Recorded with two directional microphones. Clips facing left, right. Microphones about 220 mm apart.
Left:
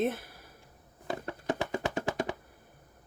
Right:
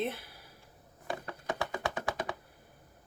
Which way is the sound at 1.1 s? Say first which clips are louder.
Left 4 dB; 25° left (ahead or behind).